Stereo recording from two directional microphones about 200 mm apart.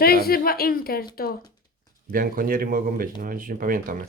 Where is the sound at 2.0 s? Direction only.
45° right (ahead or behind).